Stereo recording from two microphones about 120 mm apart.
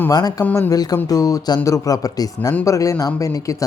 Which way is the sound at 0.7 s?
30° left (ahead or behind).